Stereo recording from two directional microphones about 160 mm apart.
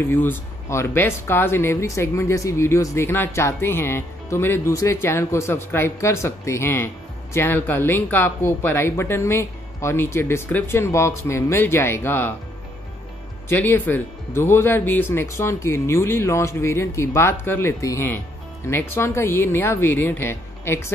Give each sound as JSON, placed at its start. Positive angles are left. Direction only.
{"t": 0.1, "sound": "speech", "side_deg": 15}
{"t": 13.5, "sound": "speech", "side_deg": 10}